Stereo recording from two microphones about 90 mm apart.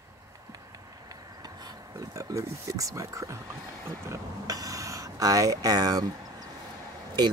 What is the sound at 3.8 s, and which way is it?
Speech, 35° right (ahead or behind).